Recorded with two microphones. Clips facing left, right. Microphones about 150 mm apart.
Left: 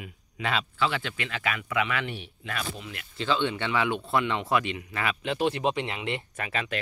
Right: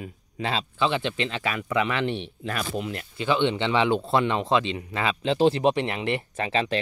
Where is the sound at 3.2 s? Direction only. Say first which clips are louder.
Right 4 dB; 20° right (ahead or behind).